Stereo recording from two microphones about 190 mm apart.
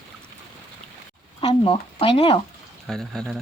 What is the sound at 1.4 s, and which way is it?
Speech, 25° left (ahead or behind).